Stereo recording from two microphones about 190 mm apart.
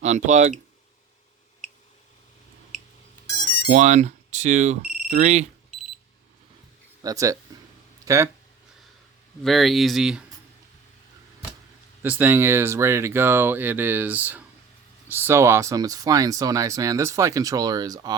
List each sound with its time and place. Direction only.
0.0 s speech: 40° right (ahead or behind)
3.7 s speech: 40° right (ahead or behind)
7.0 s speech: 15° right (ahead or behind)
9.4 s speech: centre (ahead or behind)
12.0 s speech: 10° right (ahead or behind)